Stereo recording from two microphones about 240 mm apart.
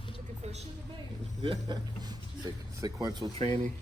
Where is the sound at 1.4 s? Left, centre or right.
Centre.